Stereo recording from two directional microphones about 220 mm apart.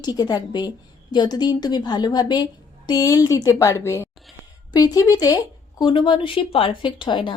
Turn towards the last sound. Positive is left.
turn(degrees=20)  # may be behind; listen again after turning